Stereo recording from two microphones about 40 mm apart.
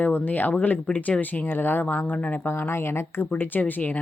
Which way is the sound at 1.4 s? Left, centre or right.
Left.